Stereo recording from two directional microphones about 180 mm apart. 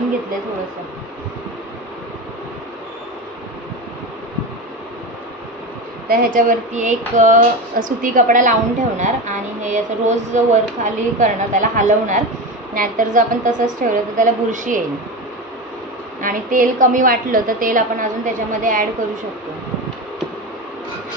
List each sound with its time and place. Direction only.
6.0 s a woman's voice: 45° right (ahead or behind)
16.2 s a woman's voice: 50° right (ahead or behind)